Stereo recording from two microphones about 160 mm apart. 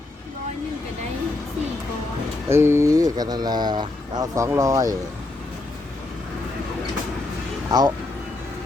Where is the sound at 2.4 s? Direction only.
15° right (ahead or behind).